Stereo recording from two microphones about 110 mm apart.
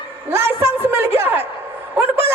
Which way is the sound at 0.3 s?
20° right (ahead or behind).